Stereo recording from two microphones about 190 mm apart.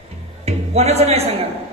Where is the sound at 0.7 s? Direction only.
35° right (ahead or behind).